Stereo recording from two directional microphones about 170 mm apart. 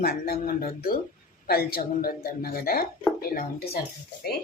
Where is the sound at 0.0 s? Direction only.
65° left (ahead or behind).